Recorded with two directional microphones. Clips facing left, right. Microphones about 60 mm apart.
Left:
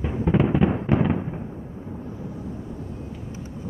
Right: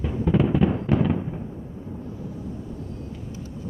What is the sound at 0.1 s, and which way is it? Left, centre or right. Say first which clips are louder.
Fireworks: even; left.